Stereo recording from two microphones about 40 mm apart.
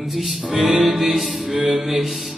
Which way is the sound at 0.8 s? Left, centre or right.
Centre.